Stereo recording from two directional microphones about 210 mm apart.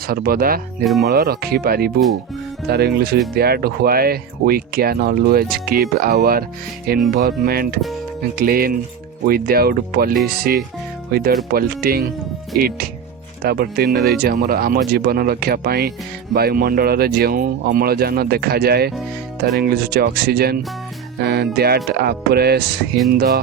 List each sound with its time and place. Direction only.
0.1 s speech: 45° right (ahead or behind)